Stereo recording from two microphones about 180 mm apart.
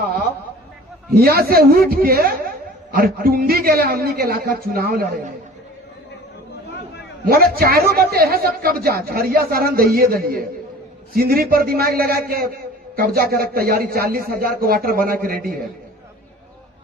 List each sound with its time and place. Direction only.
1.1 s a man's voice: 55° right (ahead or behind)
7.3 s a man's voice: 55° right (ahead or behind)